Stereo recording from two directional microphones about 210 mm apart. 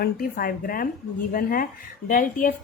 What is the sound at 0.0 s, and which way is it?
A woman's voice, 45° left (ahead or behind).